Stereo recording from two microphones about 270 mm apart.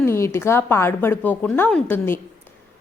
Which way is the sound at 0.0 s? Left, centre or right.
Centre.